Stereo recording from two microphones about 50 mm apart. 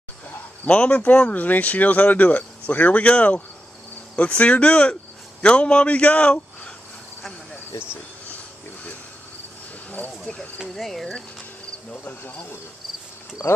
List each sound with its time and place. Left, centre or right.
0.7 s speech: left
9.8 s a sound: left
10.7 s speech: centre
11.9 s speech: left
13.4 s speech: left